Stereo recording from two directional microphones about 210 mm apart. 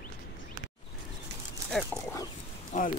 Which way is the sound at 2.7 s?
35° left (ahead or behind).